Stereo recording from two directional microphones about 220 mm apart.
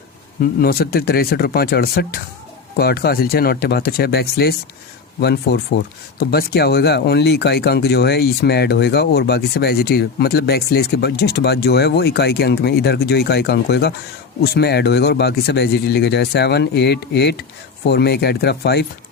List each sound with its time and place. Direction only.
0.6 s speech: 45° left (ahead or behind)